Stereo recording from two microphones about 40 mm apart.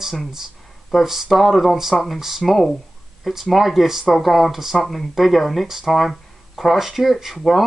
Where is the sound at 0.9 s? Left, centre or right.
Centre.